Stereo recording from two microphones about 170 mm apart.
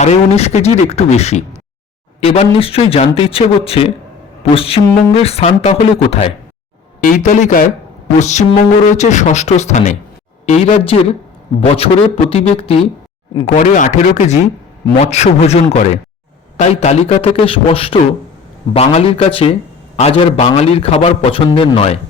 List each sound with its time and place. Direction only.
0.0 s speech: 40° left (ahead or behind)
7.0 s speech: 50° left (ahead or behind); by 12.9 s 35° left (ahead or behind)
13.4 s speech: 50° left (ahead or behind)